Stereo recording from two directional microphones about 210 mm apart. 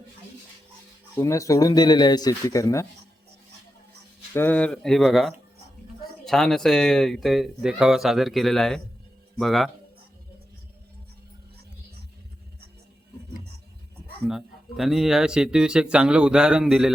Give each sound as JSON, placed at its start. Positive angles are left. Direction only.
{"t": 1.1, "sound": "speech", "side_deg": 15}
{"t": 4.4, "sound": "speech", "side_deg": 10}
{"t": 14.3, "sound": "speech", "side_deg": 0}